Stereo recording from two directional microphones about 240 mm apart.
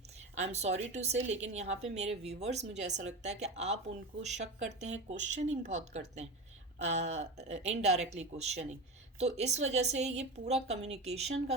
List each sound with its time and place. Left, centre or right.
0.4 s speech: right